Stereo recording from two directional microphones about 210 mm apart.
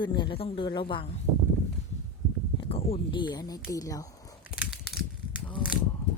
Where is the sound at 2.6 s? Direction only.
25° left (ahead or behind).